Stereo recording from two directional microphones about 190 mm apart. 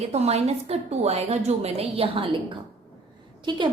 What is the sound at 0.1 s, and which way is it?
A woman's voice, 35° right (ahead or behind).